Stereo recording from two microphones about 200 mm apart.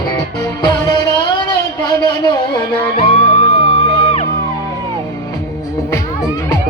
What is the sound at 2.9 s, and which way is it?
Music, 30° left (ahead or behind).